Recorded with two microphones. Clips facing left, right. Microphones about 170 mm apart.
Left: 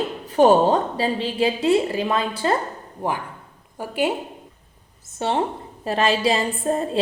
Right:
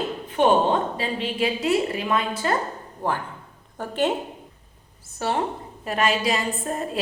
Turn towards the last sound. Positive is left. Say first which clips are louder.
# left 5 dB
turn(degrees=30)  # may be behind; listen again after turning